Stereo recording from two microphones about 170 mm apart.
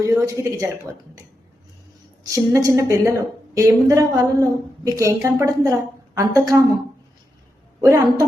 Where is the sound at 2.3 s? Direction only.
20° right (ahead or behind).